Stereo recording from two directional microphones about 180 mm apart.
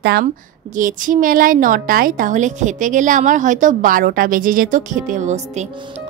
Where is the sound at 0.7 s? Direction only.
45° right (ahead or behind).